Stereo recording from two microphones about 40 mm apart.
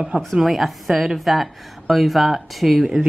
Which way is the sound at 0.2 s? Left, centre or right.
Centre.